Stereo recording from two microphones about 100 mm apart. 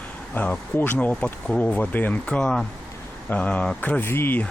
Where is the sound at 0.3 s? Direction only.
20° left (ahead or behind).